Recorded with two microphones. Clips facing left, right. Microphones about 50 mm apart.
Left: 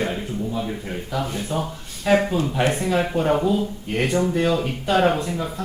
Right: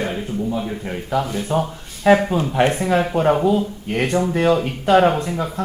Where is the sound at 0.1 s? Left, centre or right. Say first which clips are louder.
Right 3 dB; centre.